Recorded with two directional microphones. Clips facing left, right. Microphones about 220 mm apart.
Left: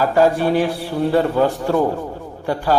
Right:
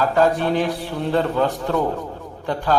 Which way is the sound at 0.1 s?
10° left (ahead or behind).